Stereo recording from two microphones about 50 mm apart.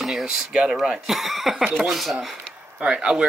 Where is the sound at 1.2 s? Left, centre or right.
Centre.